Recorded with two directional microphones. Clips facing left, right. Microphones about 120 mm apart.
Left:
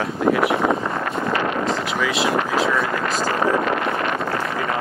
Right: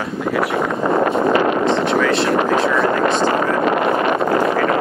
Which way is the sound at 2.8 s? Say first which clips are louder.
Right 7 dB; 25° right (ahead or behind).